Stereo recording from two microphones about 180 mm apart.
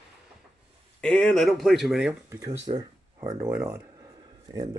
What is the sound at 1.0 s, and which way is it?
Speech, 5° left (ahead or behind).